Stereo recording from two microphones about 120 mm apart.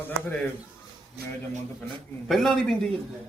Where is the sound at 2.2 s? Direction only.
Centre (ahead or behind).